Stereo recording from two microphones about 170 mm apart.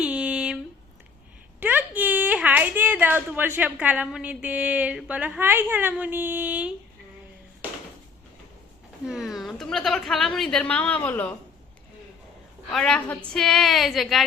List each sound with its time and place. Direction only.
0.0 s a sound: 5° right (ahead or behind)
1.5 s a woman's voice: 10° right (ahead or behind)
9.0 s a woman's voice: centre (ahead or behind)
12.7 s a woman's voice: 5° left (ahead or behind)